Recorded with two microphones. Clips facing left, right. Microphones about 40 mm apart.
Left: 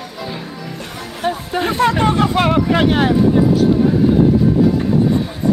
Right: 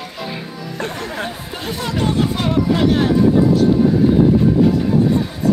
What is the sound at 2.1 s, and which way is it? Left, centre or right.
Hubbub, left.